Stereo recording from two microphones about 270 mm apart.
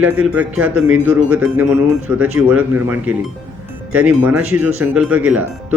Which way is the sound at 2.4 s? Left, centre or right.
Centre.